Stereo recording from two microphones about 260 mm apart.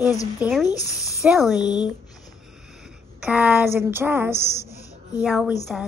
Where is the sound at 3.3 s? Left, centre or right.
Centre.